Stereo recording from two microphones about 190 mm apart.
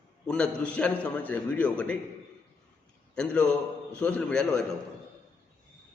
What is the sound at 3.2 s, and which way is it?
A man's voice, 5° left (ahead or behind).